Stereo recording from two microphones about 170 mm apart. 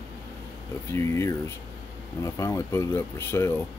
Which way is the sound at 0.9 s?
15° left (ahead or behind).